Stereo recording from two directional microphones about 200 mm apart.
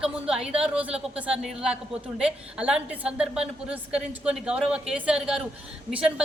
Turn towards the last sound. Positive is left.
turn(degrees=-5)  # may be behind; listen again after turning